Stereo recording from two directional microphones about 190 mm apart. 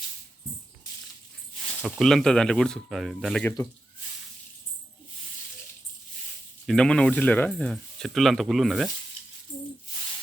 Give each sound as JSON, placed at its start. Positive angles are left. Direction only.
{"t": 1.8, "sound": "speech", "side_deg": 0}
{"t": 6.7, "sound": "speech", "side_deg": 5}